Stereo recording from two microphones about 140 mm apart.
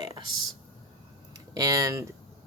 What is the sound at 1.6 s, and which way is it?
Speech, 25° right (ahead or behind).